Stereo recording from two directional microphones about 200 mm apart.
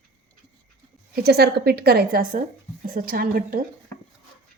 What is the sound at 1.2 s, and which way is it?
Speech, 50° right (ahead or behind).